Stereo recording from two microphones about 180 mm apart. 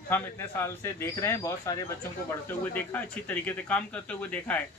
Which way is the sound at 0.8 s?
15° left (ahead or behind).